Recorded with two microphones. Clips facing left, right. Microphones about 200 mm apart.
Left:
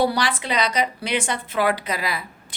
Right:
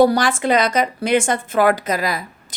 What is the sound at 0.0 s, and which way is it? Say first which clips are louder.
A woman's voice: right 7 dB; 45° right (ahead or behind).